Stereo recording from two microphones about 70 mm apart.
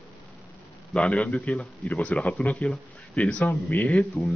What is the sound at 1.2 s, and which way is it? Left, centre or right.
A man's voice, left.